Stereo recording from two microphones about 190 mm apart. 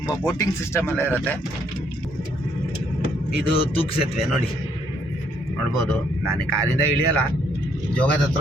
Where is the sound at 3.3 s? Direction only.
30° left (ahead or behind).